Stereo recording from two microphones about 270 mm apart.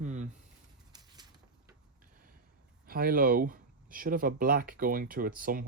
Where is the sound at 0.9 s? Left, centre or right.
Centre.